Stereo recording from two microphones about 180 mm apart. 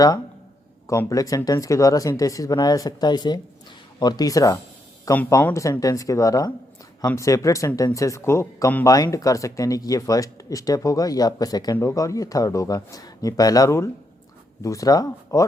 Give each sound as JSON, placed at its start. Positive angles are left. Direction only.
{"t": 0.9, "sound": "speech", "side_deg": 20}